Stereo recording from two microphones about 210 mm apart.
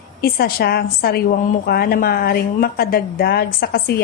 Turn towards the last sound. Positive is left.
turn(degrees=45)  # may be behind; listen again after turning